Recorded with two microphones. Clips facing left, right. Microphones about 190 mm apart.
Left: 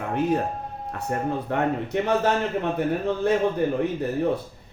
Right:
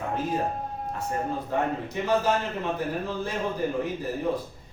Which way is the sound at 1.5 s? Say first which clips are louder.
Left 2 dB; 65° left (ahead or behind).